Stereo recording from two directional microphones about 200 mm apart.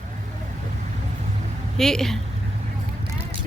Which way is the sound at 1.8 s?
Centre (ahead or behind).